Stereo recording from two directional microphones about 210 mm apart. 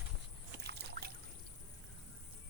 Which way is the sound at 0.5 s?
50° right (ahead or behind).